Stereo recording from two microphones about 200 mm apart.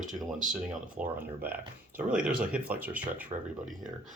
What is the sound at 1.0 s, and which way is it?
Speech, 40° right (ahead or behind).